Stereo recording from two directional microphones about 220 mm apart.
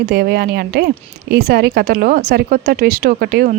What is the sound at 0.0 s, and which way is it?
A woman's voice, 45° right (ahead or behind).